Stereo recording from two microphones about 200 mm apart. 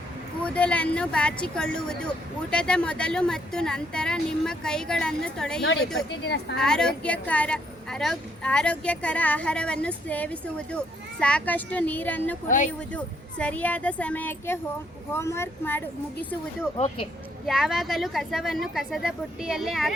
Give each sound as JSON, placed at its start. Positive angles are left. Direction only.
{"t": 0.4, "sound": "a woman's voice", "side_deg": 5}
{"t": 5.6, "sound": "speech", "side_deg": 65}
{"t": 6.6, "sound": "a woman's voice", "side_deg": 5}
{"t": 12.5, "sound": "speech", "side_deg": 40}
{"t": 13.4, "sound": "speech", "side_deg": 5}
{"t": 16.7, "sound": "speech", "side_deg": 30}
{"t": 17.4, "sound": "a woman's voice", "side_deg": 0}